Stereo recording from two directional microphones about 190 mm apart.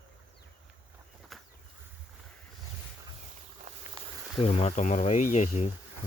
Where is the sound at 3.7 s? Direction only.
40° right (ahead or behind).